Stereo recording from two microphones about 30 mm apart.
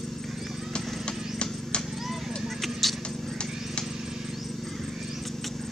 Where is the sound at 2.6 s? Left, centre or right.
Centre.